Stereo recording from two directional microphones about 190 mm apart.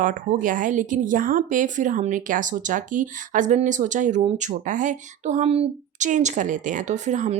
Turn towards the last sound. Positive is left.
turn(degrees=-40)  # may be behind; listen again after turning